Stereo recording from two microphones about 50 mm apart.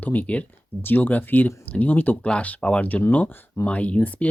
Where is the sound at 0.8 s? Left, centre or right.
Left.